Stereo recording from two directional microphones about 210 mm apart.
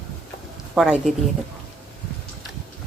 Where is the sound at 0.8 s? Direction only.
5° right (ahead or behind).